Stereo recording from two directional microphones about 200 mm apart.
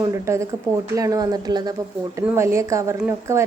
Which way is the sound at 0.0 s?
15° right (ahead or behind).